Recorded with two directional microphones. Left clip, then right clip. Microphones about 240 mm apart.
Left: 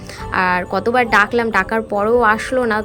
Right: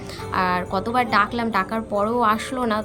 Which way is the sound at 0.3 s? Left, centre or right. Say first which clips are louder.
Left 5 dB; centre.